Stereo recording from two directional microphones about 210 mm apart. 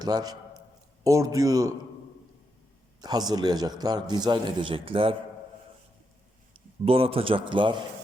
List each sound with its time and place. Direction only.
0.0 s a man's voice: 20° right (ahead or behind)
3.0 s a man's voice: 20° right (ahead or behind)
6.5 s a man's voice: 25° right (ahead or behind)